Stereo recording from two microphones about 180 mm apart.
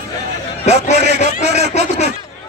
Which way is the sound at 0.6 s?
40° left (ahead or behind).